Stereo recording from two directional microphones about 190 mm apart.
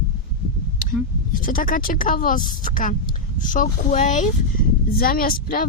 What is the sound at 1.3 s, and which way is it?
Speech, 45° left (ahead or behind).